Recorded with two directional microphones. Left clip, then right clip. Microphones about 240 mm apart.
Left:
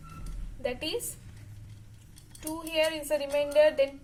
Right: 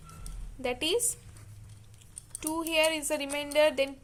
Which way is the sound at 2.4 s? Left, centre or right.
Right.